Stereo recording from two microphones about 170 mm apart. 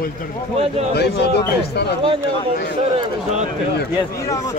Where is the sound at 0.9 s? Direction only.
75° left (ahead or behind).